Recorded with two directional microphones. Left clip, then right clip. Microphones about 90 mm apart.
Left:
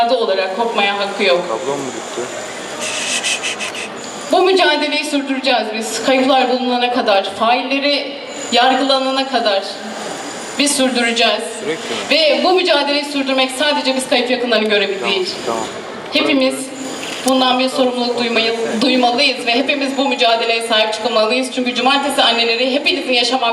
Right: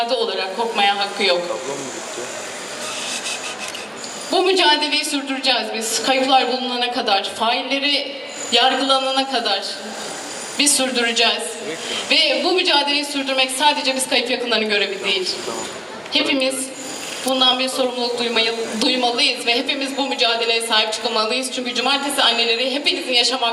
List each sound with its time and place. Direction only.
0.1 s a woman's voice: 15° right (ahead or behind)
3.1 s rub: 20° left (ahead or behind)
4.3 s a woman's voice: 15° right (ahead or behind)